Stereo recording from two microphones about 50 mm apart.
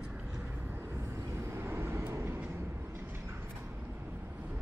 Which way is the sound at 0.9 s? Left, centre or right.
Right.